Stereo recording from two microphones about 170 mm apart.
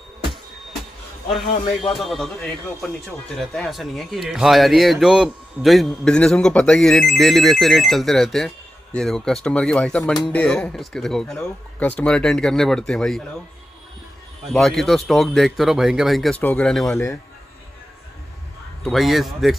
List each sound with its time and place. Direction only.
2.0 s a man's voice: centre (ahead or behind)
14.5 s a man's voice: centre (ahead or behind)
16.9 s a man's voice: 15° left (ahead or behind)
18.9 s a man's voice: centre (ahead or behind)